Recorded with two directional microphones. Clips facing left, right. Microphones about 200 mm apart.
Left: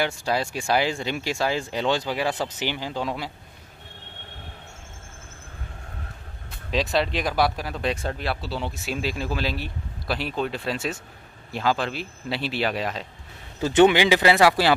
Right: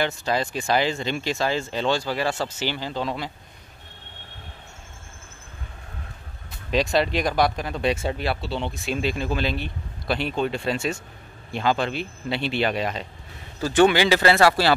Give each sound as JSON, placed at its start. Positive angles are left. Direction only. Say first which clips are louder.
{"t": 0.0, "sound": "speech", "louder": "right 1 dB", "side_deg": 10}
{"t": 6.7, "sound": "speech", "louder": "right 2 dB", "side_deg": 0}
{"t": 13.6, "sound": "speech", "louder": "left 1 dB", "side_deg": 20}